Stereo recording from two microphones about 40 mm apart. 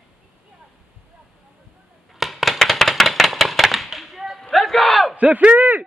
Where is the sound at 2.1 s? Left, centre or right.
Centre.